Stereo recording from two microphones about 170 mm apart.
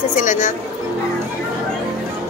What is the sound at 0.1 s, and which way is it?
Speech, 50° left (ahead or behind).